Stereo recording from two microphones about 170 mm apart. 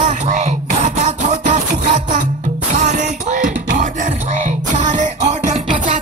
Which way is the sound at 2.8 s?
45° right (ahead or behind).